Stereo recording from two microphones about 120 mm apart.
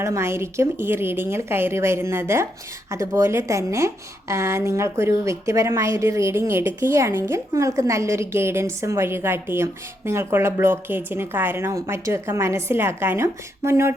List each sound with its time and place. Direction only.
0.0 s a woman's voice: 25° right (ahead or behind)